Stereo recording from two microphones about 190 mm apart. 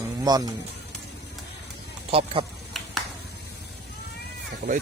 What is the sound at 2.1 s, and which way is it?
Speech, 30° right (ahead or behind).